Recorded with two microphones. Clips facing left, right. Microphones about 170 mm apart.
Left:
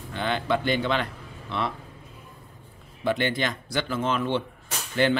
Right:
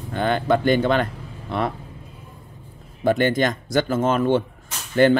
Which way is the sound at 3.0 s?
45° right (ahead or behind).